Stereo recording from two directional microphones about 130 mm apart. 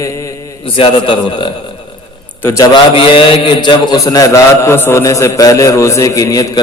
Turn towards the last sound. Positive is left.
turn(degrees=25)  # may be behind; listen again after turning